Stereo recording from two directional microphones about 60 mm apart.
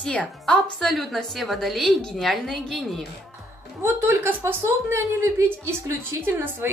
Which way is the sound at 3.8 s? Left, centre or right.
Right.